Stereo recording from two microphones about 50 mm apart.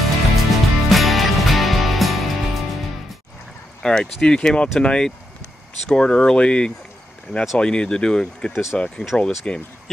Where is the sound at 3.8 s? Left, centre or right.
Centre.